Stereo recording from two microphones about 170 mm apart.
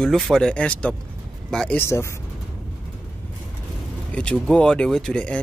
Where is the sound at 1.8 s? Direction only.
15° left (ahead or behind).